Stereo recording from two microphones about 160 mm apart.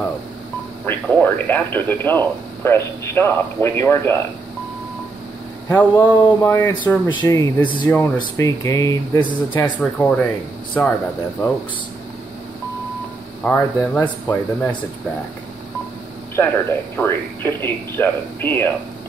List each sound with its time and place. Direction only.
0.8 s speech: 10° left (ahead or behind)
5.7 s speech: 15° left (ahead or behind)
9.8 s speech: 10° left (ahead or behind)
13.4 s speech: 10° left (ahead or behind)
16.3 s speech: 15° left (ahead or behind)